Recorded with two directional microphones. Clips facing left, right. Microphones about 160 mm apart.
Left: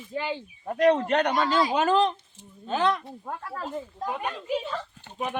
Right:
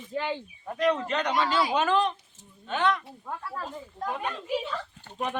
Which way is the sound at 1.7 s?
40° left (ahead or behind).